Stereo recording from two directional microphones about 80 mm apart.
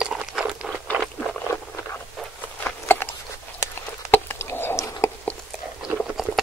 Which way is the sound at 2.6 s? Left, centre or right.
Left.